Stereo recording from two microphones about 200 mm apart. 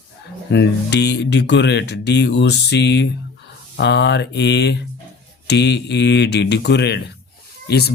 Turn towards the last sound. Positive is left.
turn(degrees=55)  # may be behind; listen again after turning